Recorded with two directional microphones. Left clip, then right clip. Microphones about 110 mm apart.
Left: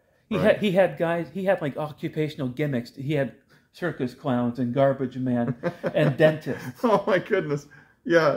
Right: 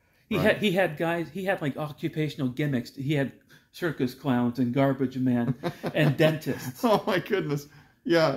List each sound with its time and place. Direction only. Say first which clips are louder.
0.3 s speech: left 3 dB; 30° left (ahead or behind)
5.6 s speech: left 4 dB; 25° right (ahead or behind)
6.1 s speech: left 4 dB; 25° left (ahead or behind)
6.6 s speech: left 2 dB; 30° right (ahead or behind)